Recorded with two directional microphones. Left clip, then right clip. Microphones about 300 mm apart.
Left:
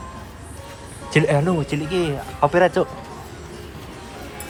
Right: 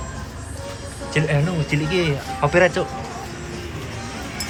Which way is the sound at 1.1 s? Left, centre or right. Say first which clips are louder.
Left 4 dB; centre.